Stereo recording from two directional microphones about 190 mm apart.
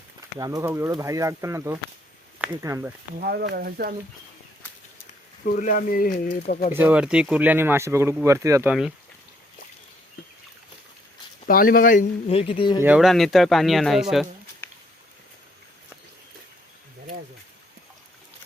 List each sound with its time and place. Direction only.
0.3 s speech: 20° right (ahead or behind)
3.2 s speech: 55° right (ahead or behind)
5.5 s speech: 45° left (ahead or behind)
6.7 s speech: 10° right (ahead or behind)
11.4 s speech: 50° left (ahead or behind)
12.3 s speech: 30° left (ahead or behind)
12.8 s speech: 5° right (ahead or behind)